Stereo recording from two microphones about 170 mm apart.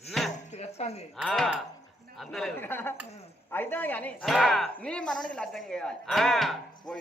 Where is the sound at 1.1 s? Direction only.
Centre (ahead or behind).